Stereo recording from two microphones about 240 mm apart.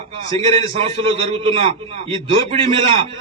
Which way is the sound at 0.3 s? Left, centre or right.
Right.